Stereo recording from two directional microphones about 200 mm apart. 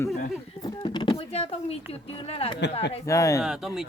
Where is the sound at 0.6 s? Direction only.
20° left (ahead or behind).